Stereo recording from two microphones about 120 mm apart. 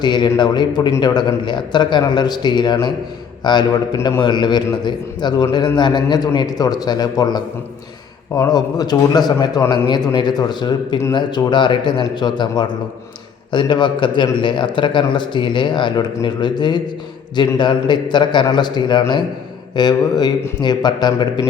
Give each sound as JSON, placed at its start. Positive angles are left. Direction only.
{"t": 0.0, "sound": "a man's voice", "side_deg": 40}